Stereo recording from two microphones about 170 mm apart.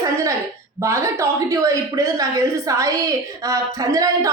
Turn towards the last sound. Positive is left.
turn(degrees=-20)  # may be behind; listen again after turning